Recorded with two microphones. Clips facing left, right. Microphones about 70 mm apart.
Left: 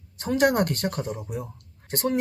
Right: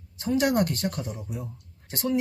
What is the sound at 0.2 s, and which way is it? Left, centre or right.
Speech, left.